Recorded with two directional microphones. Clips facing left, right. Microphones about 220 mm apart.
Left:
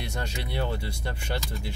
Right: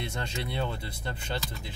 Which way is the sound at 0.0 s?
25° right (ahead or behind).